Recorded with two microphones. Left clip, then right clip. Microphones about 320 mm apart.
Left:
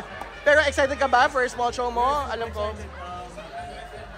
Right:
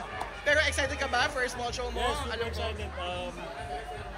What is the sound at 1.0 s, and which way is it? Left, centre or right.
Speech, left.